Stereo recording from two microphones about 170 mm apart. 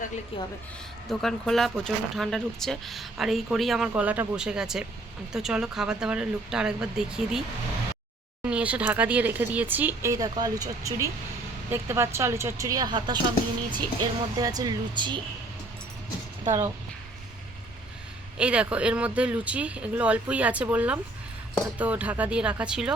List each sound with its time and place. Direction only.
0.3 s a woman's voice: 30° left (ahead or behind)
1.1 s speech: centre (ahead or behind)
8.4 s speech: 5° right (ahead or behind); by 15.2 s 25° right (ahead or behind)
16.4 s speech: 15° right (ahead or behind)
18.3 s speech: 5° right (ahead or behind)